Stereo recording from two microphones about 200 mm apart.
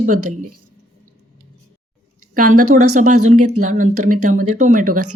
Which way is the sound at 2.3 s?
45° right (ahead or behind).